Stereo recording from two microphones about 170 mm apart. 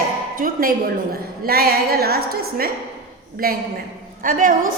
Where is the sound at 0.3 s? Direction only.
55° right (ahead or behind).